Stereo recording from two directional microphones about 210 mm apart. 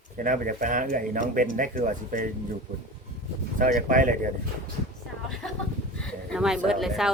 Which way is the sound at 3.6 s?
40° right (ahead or behind).